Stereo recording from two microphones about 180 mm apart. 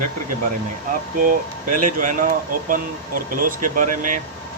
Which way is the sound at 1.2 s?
50° right (ahead or behind).